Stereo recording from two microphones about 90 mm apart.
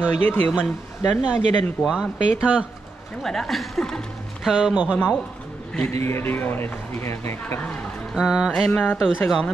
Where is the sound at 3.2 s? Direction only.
5° left (ahead or behind).